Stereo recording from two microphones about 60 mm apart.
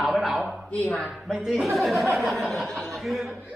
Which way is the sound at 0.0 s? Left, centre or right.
Centre.